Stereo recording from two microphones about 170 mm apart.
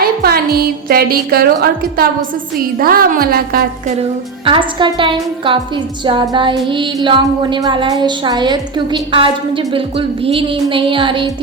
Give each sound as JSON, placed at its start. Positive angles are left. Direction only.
{"t": 0.0, "sound": "a woman's voice", "side_deg": -65}
{"t": 4.4, "sound": "a woman's voice", "side_deg": -30}
{"t": 6.1, "sound": "music", "side_deg": -30}